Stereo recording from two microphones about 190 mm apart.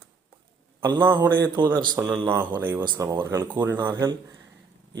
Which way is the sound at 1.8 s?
25° right (ahead or behind).